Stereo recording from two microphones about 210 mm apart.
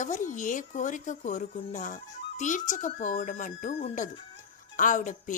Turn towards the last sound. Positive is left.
turn(degrees=35)  # may be behind; listen again after turning